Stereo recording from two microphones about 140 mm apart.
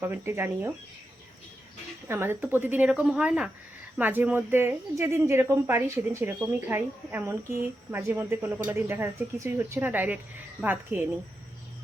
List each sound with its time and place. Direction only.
0.0 s speech: 15° right (ahead or behind)
2.0 s speech: 15° right (ahead or behind)